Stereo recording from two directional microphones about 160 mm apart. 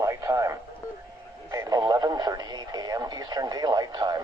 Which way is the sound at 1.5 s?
25° right (ahead or behind).